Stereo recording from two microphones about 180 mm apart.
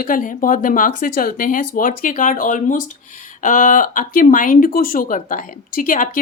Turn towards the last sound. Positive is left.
turn(degrees=45)  # may be behind; listen again after turning